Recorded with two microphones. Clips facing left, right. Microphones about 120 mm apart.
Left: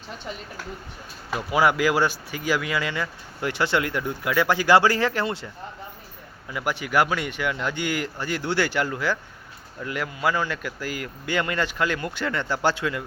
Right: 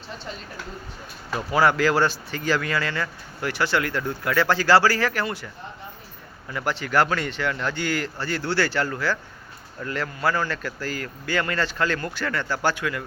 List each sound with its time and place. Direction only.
1.3 s speech: 10° left (ahead or behind)
6.5 s speech: 10° left (ahead or behind)